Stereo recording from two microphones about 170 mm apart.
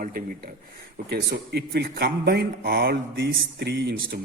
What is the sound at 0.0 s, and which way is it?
Speech, 60° right (ahead or behind).